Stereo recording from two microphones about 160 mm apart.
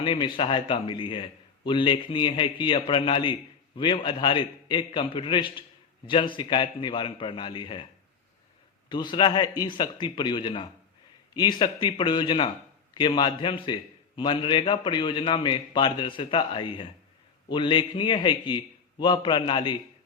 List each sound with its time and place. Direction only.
0.0 s a man's voice: 30° left (ahead or behind)
8.9 s a man's voice: 30° left (ahead or behind)